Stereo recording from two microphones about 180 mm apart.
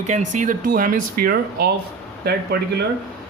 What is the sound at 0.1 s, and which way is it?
Speech, 45° right (ahead or behind).